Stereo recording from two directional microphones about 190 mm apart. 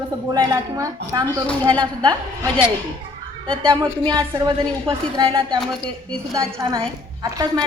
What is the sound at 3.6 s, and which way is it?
A woman's voice, 25° right (ahead or behind).